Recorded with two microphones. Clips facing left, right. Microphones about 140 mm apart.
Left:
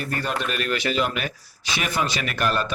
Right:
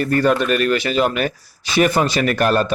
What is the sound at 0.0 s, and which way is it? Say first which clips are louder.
A man's voice: right 11 dB; 50° right (ahead or behind).